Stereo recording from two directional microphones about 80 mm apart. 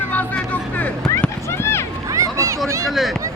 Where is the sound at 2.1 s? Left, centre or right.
Right.